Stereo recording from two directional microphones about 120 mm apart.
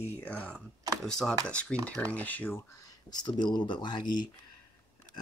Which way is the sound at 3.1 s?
35° left (ahead or behind).